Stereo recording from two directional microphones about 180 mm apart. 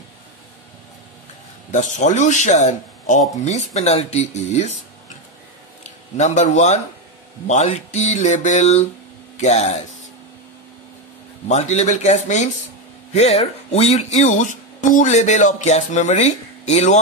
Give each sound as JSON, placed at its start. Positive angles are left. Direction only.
{"t": 1.7, "sound": "speech", "side_deg": 40}
{"t": 5.9, "sound": "a man's voice", "side_deg": 40}
{"t": 11.4, "sound": "speech", "side_deg": 40}